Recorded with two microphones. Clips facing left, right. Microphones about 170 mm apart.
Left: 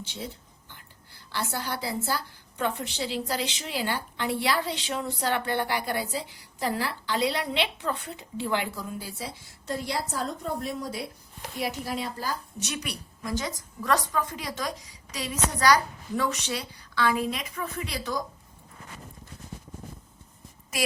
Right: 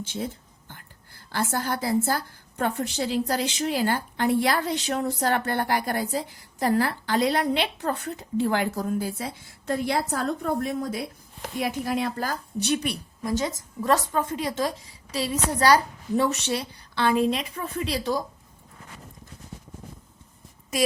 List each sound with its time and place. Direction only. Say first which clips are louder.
0.0 s a woman's voice: right 6 dB; 50° right (ahead or behind)
12.5 s a woman's voice: right 9 dB; 30° right (ahead or behind)